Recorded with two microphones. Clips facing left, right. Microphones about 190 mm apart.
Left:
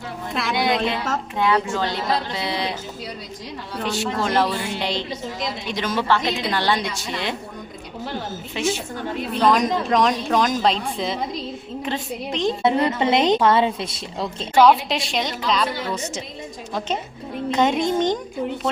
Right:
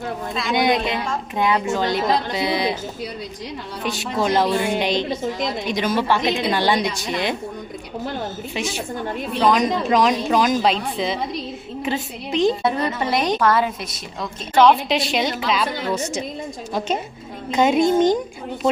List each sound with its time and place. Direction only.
0.5 s a woman's voice: 20° right (ahead or behind)
3.8 s a woman's voice: 15° right (ahead or behind)
8.5 s a woman's voice: 15° right (ahead or behind)
9.4 s speech: centre (ahead or behind)
12.6 s a woman's voice: 20° left (ahead or behind)
14.5 s speech: 5° left (ahead or behind)
17.5 s a woman's voice: 10° right (ahead or behind)